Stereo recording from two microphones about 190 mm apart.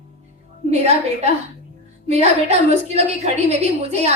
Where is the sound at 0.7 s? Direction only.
35° right (ahead or behind).